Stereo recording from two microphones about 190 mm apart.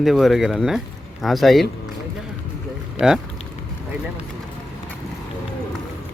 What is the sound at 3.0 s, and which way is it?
Speech, 5° right (ahead or behind).